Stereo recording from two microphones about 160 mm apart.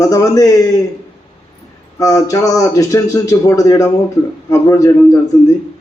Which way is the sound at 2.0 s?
20° left (ahead or behind).